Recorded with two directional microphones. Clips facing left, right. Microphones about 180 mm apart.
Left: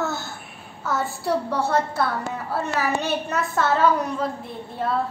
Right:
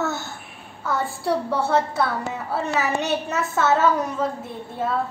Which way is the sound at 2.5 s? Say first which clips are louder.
Right 1 dB; 5° right (ahead or behind).